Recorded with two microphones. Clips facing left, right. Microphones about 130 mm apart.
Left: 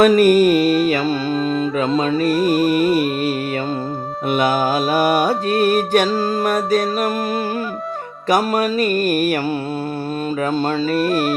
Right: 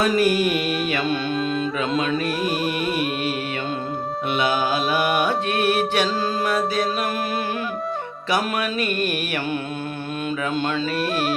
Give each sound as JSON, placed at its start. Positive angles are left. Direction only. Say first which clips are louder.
{"t": 0.0, "sound": "music", "louder": "left 8 dB", "side_deg": 50}
{"t": 8.3, "sound": "music", "louder": "left 6 dB", "side_deg": 40}